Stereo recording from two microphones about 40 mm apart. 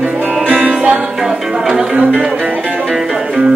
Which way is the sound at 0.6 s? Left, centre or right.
Right.